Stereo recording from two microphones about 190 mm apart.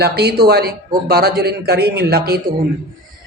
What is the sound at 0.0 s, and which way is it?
Speech, 55° right (ahead or behind).